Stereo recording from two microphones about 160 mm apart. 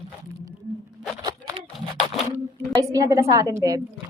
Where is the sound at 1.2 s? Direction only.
25° right (ahead or behind).